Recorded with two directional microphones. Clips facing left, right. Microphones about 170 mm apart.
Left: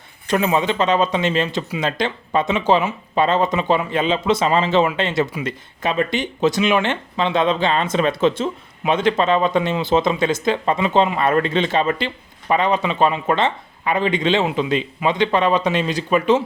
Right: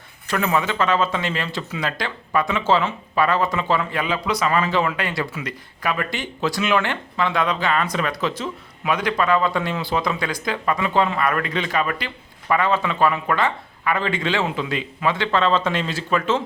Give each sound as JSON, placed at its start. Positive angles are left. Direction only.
{"t": 0.3, "sound": "speech", "side_deg": 20}